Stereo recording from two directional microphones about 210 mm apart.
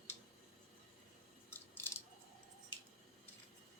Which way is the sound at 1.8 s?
10° left (ahead or behind).